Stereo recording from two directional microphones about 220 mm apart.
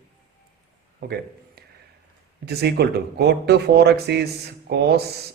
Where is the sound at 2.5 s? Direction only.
45° right (ahead or behind).